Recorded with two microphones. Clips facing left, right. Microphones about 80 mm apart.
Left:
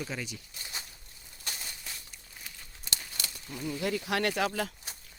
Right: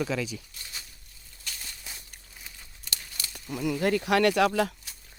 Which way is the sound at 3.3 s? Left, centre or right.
Right.